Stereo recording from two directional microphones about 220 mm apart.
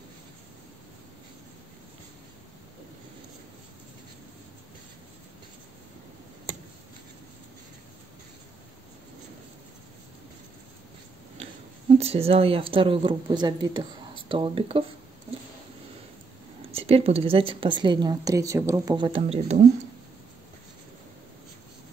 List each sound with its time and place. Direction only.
12.0 s speech: 25° right (ahead or behind)
16.7 s speech: 25° right (ahead or behind)